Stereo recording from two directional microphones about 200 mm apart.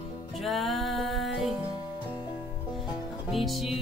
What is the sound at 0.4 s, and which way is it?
Music, centre (ahead or behind).